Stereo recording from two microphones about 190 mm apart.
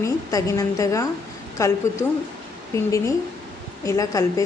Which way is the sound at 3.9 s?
15° left (ahead or behind).